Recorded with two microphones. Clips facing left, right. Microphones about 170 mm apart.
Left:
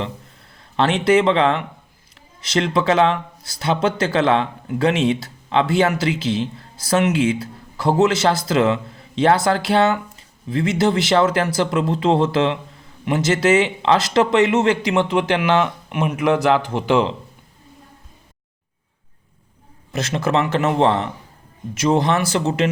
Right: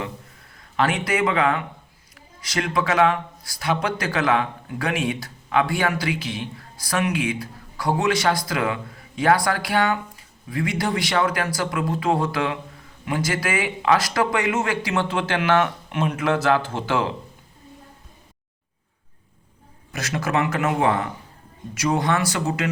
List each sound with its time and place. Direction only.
0.5 s speech: 25° left (ahead or behind)
19.9 s speech: 25° left (ahead or behind)